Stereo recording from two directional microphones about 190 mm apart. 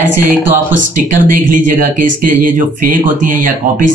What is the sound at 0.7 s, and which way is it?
Speech, 45° right (ahead or behind).